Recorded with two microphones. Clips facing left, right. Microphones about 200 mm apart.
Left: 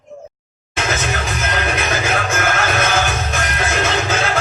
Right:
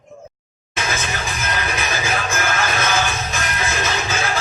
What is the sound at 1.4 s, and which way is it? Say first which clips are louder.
Music: left 4 dB; 65° left (ahead or behind).